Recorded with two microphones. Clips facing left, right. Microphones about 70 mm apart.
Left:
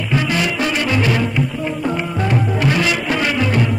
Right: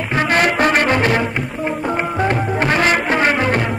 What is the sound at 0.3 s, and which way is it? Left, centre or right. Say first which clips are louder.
Music: right 5 dB; right.